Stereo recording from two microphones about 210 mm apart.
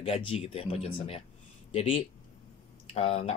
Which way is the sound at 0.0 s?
30° left (ahead or behind).